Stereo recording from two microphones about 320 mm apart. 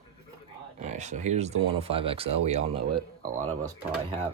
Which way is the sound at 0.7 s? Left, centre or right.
Right.